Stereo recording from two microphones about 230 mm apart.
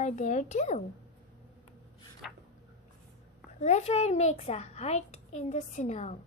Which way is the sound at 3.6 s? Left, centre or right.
Left.